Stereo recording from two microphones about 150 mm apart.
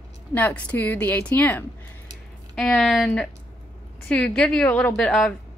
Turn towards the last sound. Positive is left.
turn(degrees=5)  # may be behind; listen again after turning